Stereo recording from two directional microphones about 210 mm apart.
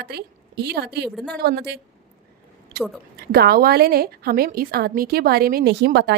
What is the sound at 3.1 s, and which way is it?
A woman's voice, 50° right (ahead or behind).